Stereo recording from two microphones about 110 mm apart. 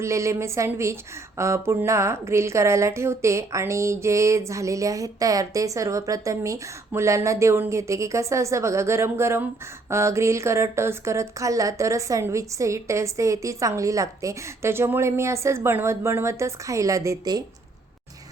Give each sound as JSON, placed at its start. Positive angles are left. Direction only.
{"t": 0.0, "sound": "speech", "side_deg": -25}